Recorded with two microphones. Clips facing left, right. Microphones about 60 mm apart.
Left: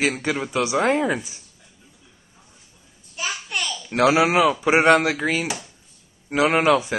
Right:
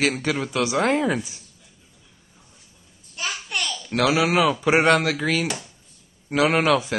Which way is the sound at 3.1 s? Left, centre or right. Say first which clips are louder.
Left 1 dB; centre.